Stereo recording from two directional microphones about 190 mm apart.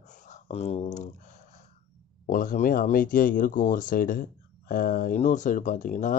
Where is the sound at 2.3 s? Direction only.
45° left (ahead or behind).